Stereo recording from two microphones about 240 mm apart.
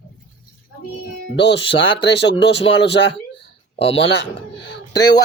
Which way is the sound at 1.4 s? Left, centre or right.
Left.